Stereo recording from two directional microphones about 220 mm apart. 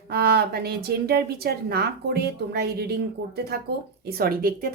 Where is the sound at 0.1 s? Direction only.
45° right (ahead or behind).